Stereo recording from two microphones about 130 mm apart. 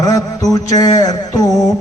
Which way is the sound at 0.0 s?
25° left (ahead or behind).